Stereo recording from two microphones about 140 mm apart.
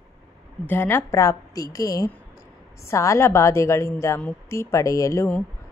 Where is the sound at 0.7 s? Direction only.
15° left (ahead or behind).